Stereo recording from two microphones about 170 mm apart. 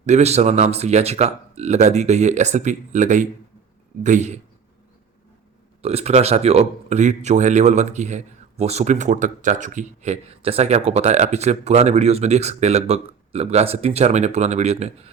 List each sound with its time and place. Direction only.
0.0 s a man's voice: 40° right (ahead or behind)
5.8 s speech: 35° right (ahead or behind)